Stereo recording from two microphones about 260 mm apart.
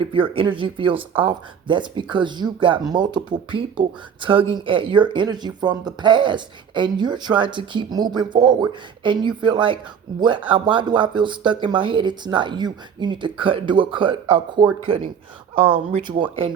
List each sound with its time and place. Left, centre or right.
0.0 s speech: centre